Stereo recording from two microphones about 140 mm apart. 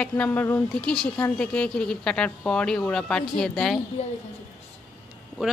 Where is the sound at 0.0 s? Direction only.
10° left (ahead or behind).